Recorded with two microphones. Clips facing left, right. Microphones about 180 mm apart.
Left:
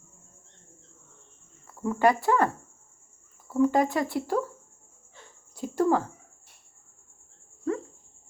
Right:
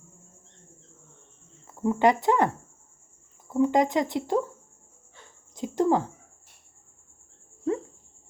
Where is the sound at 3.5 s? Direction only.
20° right (ahead or behind).